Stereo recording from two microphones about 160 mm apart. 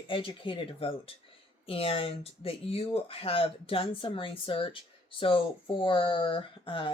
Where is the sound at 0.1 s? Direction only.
35° left (ahead or behind).